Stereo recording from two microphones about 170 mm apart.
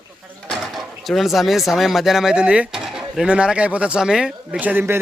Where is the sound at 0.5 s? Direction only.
Centre (ahead or behind).